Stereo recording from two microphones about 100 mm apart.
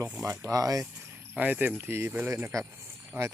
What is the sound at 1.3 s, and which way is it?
Speech, 15° right (ahead or behind).